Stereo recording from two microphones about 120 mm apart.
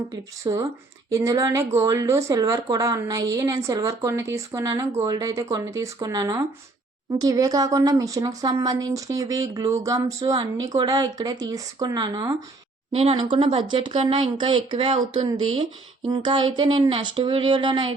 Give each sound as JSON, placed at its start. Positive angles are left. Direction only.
{"t": 0.4, "sound": "speech", "side_deg": -35}
{"t": 12.9, "sound": "a woman's voice", "side_deg": -55}
{"t": 13.1, "sound": "speech", "side_deg": -40}